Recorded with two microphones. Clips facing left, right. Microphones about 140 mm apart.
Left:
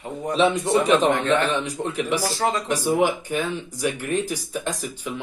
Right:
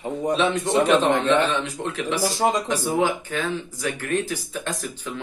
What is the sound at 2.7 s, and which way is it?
Speech, 15° left (ahead or behind).